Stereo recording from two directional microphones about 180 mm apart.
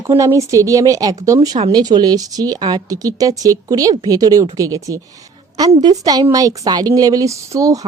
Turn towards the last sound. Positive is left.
turn(degrees=-20)  # may be behind; listen again after turning